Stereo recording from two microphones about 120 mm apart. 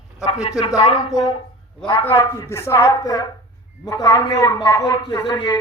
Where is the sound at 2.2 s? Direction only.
25° left (ahead or behind).